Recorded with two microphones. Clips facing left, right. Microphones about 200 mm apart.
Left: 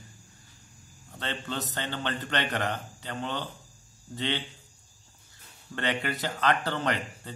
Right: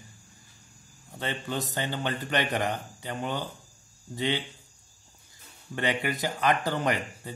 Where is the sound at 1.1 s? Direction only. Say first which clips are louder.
Right 2 dB; 10° right (ahead or behind).